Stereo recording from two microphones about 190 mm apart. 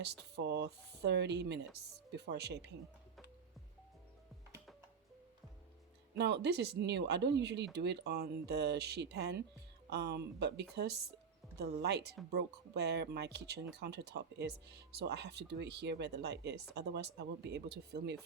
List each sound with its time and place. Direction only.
0.0 s speech: 60° right (ahead or behind)
6.1 s speech: 65° right (ahead or behind)